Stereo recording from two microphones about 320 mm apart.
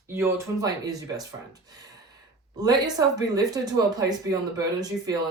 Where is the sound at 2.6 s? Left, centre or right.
Centre.